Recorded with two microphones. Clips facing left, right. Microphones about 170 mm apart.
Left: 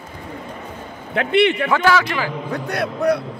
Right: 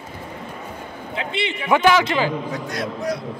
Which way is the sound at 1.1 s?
60° left (ahead or behind).